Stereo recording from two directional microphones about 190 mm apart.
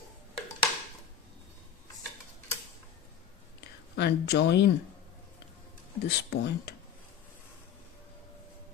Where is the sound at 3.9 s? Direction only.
60° left (ahead or behind).